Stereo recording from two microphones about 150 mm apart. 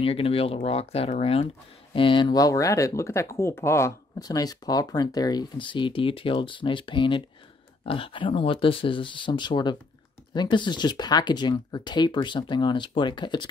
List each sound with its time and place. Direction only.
0.0 s speech: 40° left (ahead or behind)